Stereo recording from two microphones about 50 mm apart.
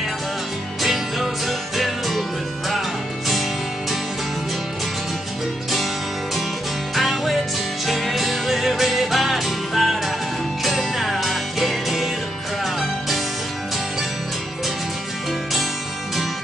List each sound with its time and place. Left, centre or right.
0.8 s music: centre
7.0 s music: centre